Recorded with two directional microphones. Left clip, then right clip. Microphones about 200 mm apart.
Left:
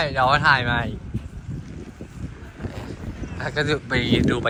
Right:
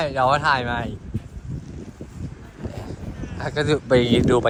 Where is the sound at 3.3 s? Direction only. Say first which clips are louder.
Right 1 dB; 20° right (ahead or behind).